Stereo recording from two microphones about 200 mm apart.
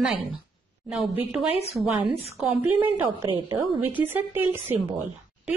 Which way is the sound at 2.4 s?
10° right (ahead or behind).